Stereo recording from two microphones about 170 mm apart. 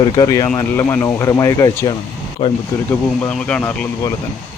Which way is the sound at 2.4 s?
30° left (ahead or behind).